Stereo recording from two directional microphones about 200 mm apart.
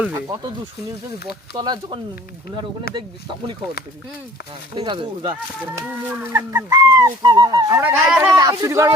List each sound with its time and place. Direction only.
1.5 s speech: 20° right (ahead or behind)
2.9 s speech: 50° left (ahead or behind)
4.7 s speech: 25° right (ahead or behind)
6.1 s speech: 10° right (ahead or behind)
7.8 s speech: 10° right (ahead or behind)